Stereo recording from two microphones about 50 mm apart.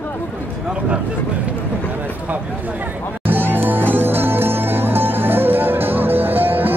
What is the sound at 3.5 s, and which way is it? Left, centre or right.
Music, right.